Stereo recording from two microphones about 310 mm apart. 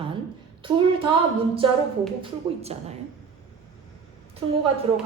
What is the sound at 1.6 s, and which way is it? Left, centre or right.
Speech, centre.